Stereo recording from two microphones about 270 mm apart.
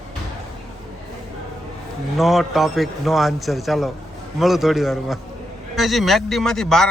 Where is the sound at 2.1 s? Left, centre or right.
Centre.